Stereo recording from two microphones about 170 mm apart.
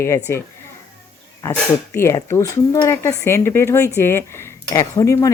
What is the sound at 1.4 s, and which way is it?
Speech, 15° left (ahead or behind).